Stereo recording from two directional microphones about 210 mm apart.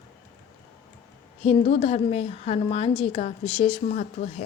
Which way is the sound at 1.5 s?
25° left (ahead or behind).